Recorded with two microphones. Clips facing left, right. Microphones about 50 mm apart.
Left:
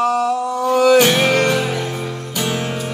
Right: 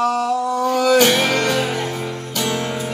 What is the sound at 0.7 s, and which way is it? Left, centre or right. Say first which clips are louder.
Music: left 3 dB; centre.